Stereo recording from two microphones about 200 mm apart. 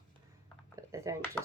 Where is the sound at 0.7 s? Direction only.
15° right (ahead or behind).